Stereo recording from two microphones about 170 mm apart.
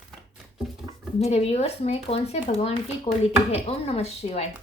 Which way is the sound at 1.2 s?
40° left (ahead or behind).